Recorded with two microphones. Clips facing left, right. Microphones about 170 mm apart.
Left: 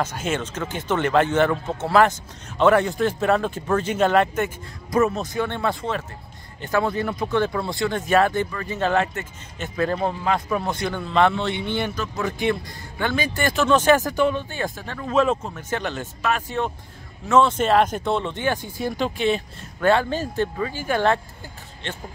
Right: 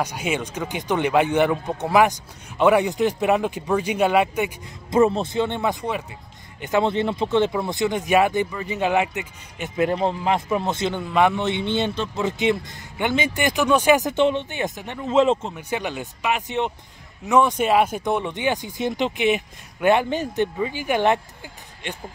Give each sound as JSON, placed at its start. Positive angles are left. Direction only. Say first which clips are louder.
{"t": 0.0, "sound": "speech", "louder": "even", "side_deg": -10}
{"t": 4.9, "sound": "speech", "louder": "right 3 dB", "side_deg": -30}
{"t": 15.5, "sound": "speech", "louder": "even", "side_deg": -15}